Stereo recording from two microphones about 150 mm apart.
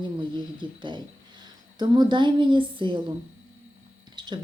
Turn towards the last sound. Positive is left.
turn(degrees=-30)  # may be behind; listen again after turning